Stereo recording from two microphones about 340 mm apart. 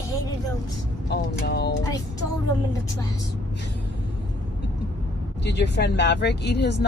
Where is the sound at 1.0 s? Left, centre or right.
Left.